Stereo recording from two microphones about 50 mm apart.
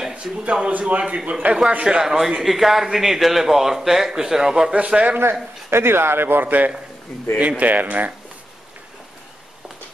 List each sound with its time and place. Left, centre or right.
0.1 s a man's voice: right
4.7 s a man's voice: right
5.1 s speech: right
5.7 s a man's voice: right